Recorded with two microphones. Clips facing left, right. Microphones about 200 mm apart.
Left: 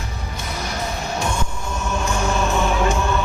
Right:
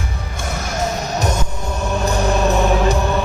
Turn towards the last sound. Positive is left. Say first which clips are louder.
# right 4 dB
turn(degrees=-35)  # may be behind; listen again after turning